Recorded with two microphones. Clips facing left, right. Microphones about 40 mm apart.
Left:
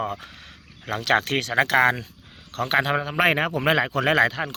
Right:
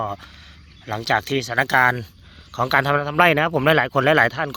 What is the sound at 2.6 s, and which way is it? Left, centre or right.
Speech, centre.